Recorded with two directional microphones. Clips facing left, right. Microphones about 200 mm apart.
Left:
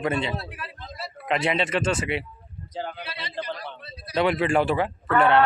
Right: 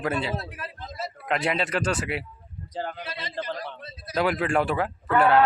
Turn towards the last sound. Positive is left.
turn(degrees=-5)  # may be behind; listen again after turning